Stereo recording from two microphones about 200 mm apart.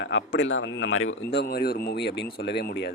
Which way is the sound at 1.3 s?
55° left (ahead or behind).